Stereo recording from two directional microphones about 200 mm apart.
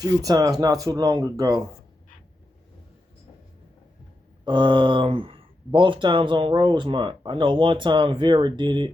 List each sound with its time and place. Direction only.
0.3 s speech: 20° right (ahead or behind)
4.4 s speech: 25° right (ahead or behind)